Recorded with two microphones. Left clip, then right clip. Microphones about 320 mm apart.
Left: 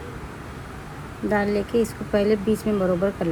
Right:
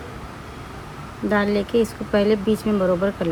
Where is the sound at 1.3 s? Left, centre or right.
Right.